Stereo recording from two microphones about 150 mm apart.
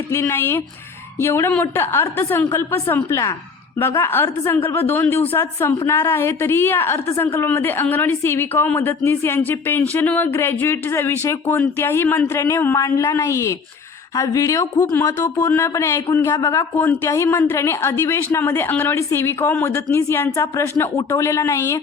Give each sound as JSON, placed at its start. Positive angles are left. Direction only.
{"t": 0.1, "sound": "a woman's voice", "side_deg": 15}